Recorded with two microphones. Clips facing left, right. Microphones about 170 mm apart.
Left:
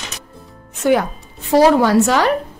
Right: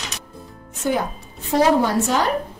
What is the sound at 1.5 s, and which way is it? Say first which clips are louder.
Speech: left 5 dB; 80° left.